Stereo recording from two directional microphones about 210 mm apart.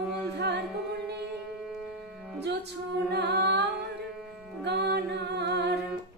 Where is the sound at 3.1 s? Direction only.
50° right (ahead or behind).